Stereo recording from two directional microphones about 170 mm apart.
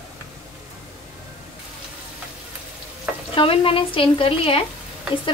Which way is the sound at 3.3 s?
30° left (ahead or behind).